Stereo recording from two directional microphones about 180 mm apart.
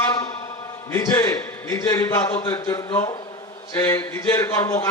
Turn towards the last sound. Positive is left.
turn(degrees=15)  # may be behind; listen again after turning